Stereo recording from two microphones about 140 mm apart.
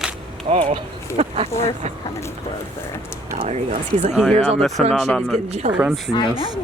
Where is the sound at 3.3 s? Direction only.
65° right (ahead or behind).